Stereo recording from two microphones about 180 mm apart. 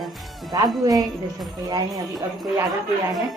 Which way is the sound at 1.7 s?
20° right (ahead or behind).